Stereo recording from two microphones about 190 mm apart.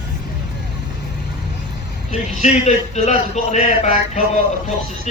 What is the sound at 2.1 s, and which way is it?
A man's voice, 35° left (ahead or behind).